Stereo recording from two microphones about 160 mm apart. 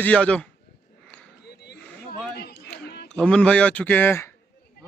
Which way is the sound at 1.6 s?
85° left.